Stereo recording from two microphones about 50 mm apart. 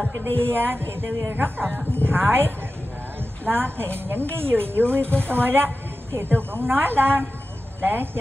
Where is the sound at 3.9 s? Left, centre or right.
Right.